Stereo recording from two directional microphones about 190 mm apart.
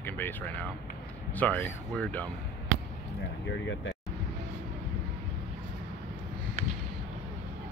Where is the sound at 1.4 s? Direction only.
10° left (ahead or behind).